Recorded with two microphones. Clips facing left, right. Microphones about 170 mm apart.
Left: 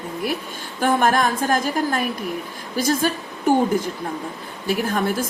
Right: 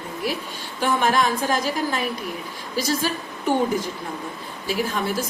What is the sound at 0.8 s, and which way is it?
A woman's voice, 50° left (ahead or behind).